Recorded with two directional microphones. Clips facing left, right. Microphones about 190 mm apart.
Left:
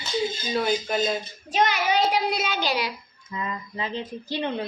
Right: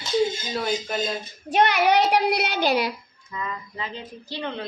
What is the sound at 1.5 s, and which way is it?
A child's voice, 60° right (ahead or behind).